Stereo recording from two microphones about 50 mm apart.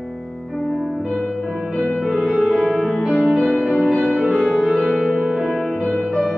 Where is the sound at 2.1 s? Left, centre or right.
Right.